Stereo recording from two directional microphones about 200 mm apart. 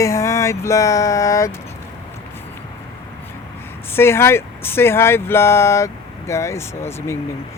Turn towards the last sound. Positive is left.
turn(degrees=10)  # may be behind; listen again after turning